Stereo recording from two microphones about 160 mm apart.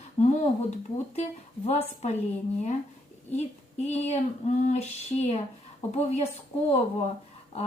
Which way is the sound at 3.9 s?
40° left (ahead or behind).